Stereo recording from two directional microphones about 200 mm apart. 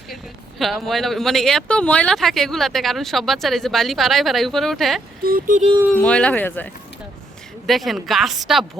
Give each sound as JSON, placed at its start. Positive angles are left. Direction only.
{"t": 0.6, "sound": "speech", "side_deg": 0}
{"t": 5.2, "sound": "speech", "side_deg": -45}
{"t": 5.9, "sound": "speech", "side_deg": 5}
{"t": 7.7, "sound": "speech", "side_deg": 0}